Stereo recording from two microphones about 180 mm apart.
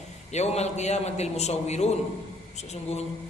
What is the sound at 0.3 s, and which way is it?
A man's voice, 40° left (ahead or behind).